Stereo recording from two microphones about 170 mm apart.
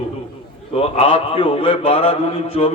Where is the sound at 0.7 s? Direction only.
35° left (ahead or behind).